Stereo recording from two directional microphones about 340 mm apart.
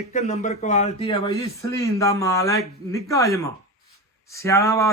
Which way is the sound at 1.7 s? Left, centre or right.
Centre.